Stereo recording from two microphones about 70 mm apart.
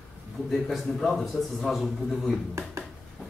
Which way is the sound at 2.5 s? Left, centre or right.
Right.